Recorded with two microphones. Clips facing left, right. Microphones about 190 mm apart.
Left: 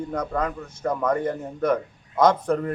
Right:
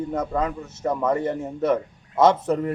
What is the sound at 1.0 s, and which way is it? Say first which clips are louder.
A man's voice: right 1 dB; 5° right (ahead or behind).